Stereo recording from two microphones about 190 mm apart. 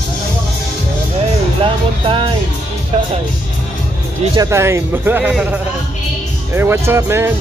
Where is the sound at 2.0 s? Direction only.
25° right (ahead or behind).